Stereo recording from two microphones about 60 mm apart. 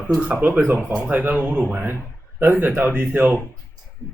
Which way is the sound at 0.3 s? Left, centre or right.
Right.